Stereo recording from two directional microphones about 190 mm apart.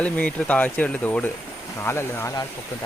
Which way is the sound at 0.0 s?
5° left (ahead or behind).